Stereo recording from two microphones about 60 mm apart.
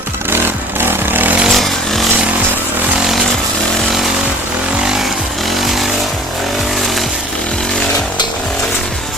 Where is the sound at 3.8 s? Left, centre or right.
Centre.